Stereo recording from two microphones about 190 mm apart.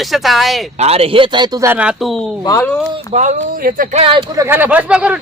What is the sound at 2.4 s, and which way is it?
Speech, 20° left (ahead or behind).